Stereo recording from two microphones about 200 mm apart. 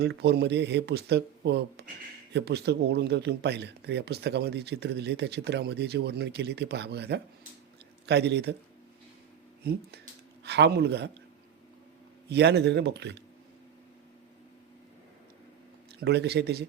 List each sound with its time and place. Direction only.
0.0 s speech: 55° right (ahead or behind)
9.7 s speech: 50° right (ahead or behind)
12.3 s speech: 55° right (ahead or behind)
16.0 s speech: 55° right (ahead or behind)